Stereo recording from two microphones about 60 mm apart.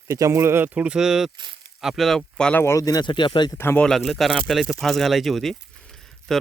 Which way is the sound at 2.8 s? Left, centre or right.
Left.